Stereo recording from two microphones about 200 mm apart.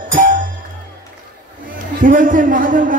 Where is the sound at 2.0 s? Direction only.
40° right (ahead or behind).